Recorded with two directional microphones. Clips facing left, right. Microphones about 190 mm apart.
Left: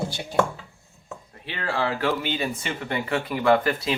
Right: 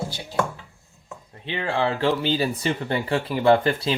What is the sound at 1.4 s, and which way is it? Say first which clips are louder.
Speech: right 3 dB; 20° right (ahead or behind).